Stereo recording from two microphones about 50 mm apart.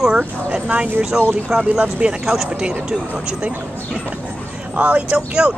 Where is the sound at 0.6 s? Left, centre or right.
Right.